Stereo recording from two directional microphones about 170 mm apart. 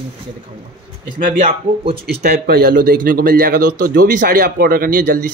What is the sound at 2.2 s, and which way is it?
Speech, 65° right (ahead or behind).